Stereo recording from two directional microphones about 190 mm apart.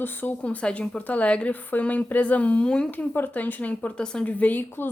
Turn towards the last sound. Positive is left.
turn(degrees=10)  # may be behind; listen again after turning